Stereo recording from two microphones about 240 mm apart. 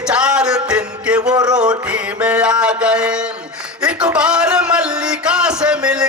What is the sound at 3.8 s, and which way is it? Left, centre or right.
Music, centre.